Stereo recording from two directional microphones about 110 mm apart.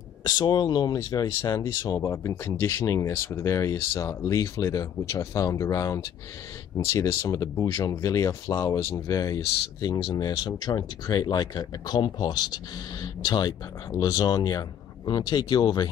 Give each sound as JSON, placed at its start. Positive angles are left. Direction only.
{"t": 0.2, "sound": "speech", "side_deg": 40}